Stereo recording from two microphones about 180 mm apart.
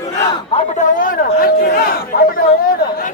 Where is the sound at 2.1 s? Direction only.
60° left (ahead or behind).